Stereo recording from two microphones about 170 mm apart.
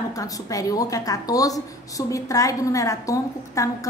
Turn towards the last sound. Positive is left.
turn(degrees=20)  # may be behind; listen again after turning